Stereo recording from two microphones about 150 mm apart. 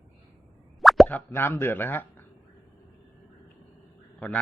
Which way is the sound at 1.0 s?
15° left (ahead or behind).